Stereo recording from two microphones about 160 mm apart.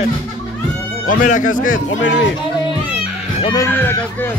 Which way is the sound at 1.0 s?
50° left (ahead or behind).